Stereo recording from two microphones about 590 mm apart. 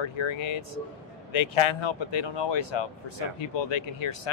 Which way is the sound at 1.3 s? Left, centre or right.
Left.